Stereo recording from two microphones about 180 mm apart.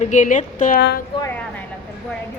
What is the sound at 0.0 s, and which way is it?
Speech, 45° left (ahead or behind).